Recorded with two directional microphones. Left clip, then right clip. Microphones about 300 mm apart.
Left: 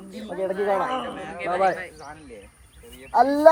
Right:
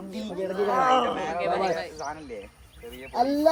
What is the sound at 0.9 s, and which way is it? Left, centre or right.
Speech, right.